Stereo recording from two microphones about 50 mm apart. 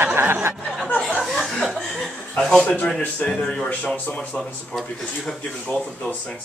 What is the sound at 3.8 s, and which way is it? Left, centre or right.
Speech, left.